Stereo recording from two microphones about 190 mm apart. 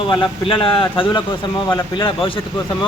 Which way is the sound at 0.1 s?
25° left (ahead or behind).